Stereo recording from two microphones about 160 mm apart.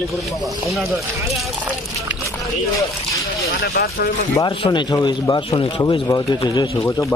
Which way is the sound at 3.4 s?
80° left.